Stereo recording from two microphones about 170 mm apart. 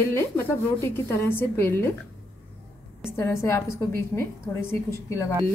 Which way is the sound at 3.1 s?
15° left (ahead or behind).